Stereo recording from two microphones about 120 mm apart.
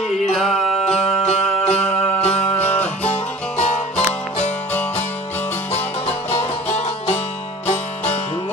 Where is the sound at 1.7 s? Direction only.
10° left (ahead or behind).